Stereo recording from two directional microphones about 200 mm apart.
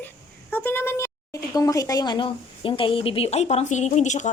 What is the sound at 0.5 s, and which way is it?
A woman's voice, 10° left (ahead or behind).